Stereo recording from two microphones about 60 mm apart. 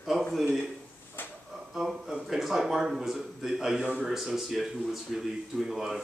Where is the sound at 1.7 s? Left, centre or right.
Centre.